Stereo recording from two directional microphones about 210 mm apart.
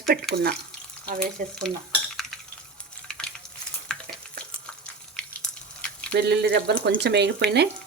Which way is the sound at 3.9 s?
Centre (ahead or behind).